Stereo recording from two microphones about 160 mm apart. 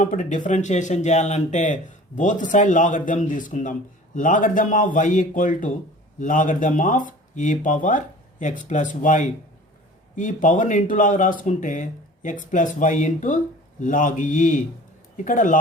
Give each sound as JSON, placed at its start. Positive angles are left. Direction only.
{"t": 0.0, "sound": "a man's voice", "side_deg": 55}